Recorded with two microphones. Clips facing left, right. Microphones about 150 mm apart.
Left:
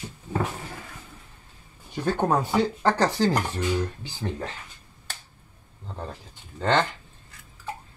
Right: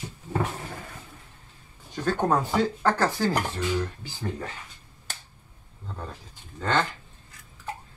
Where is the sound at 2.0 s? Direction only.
15° left (ahead or behind).